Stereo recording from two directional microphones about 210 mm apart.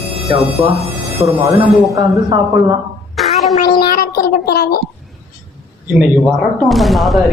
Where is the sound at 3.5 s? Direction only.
25° left (ahead or behind).